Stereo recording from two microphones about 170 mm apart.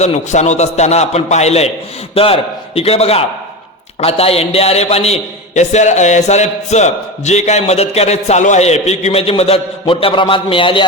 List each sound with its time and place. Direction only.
0.0 s a man's voice: 40° left (ahead or behind)